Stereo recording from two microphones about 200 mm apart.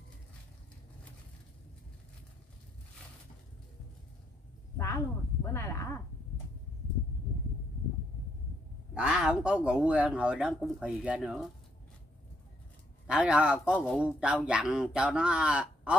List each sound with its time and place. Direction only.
4.7 s speech: 15° left (ahead or behind)
8.9 s a man's voice: 5° right (ahead or behind)
13.0 s a man's voice: 5° right (ahead or behind)